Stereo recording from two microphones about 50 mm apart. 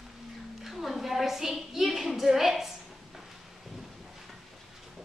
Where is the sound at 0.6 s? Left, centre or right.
Centre.